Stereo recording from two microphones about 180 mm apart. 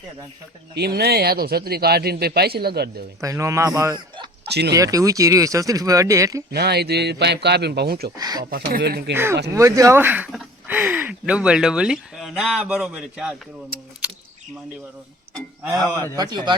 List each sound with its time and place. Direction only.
0.8 s speech: 60° right (ahead or behind)
3.2 s speech: 15° right (ahead or behind)
6.5 s speech: 65° right (ahead or behind)
8.1 s speech: 20° right (ahead or behind)
8.4 s speech: 60° right (ahead or behind)
9.1 s speech: 15° right (ahead or behind)
13.7 s speech: 55° right (ahead or behind)
16.1 s speech: 25° right (ahead or behind)